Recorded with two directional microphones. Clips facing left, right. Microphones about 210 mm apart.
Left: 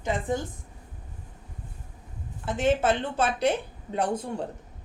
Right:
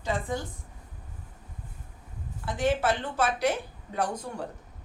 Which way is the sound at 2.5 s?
25° left (ahead or behind).